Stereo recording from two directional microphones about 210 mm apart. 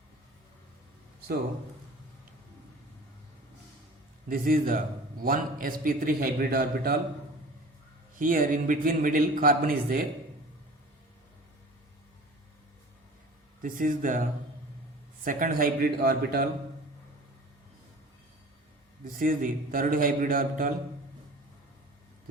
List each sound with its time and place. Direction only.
4.3 s a man's voice: 45° right (ahead or behind)
8.2 s a man's voice: 40° right (ahead or behind)
13.6 s a man's voice: 40° right (ahead or behind)
19.2 s a man's voice: 40° right (ahead or behind)